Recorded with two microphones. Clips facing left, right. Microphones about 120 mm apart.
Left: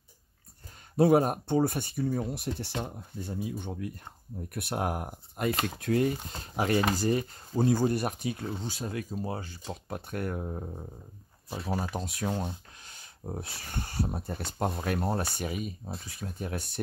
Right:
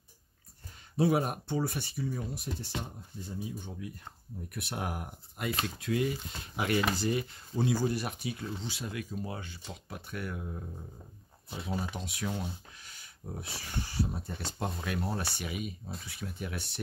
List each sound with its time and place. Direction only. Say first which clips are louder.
0.9 s speech: left 6 dB; 45° left (ahead or behind); by 3.9 s 65° left (ahead or behind)
4.6 s speech: left 6 dB; 45° left (ahead or behind)